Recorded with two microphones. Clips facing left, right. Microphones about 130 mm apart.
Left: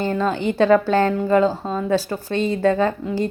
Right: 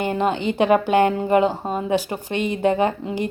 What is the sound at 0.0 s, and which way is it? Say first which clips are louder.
A woman's voice: even; 20° right (ahead or behind).